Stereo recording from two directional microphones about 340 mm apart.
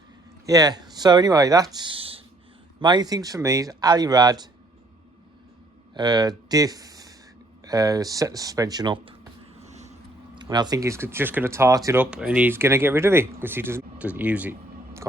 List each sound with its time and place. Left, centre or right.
0.4 s speech: centre
5.9 s speech: centre
9.6 s vehicle: centre
10.3 s speech: centre